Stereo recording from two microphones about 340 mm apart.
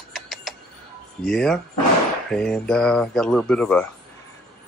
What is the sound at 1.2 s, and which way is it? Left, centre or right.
Speech, centre.